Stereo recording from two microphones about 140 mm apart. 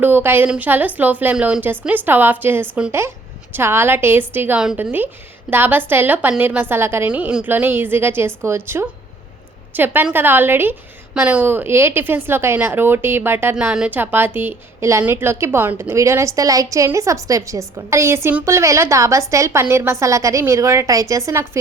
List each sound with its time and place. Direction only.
0.0 s a woman's voice: 15° right (ahead or behind)